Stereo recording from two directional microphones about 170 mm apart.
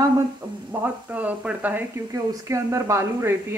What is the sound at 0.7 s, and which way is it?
Speech, 10° right (ahead or behind).